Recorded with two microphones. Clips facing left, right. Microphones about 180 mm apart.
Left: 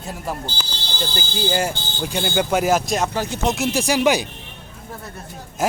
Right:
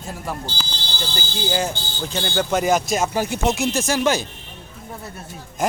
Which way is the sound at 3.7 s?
10° left (ahead or behind).